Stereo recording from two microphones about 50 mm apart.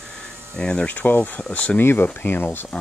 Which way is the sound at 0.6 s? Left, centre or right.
Centre.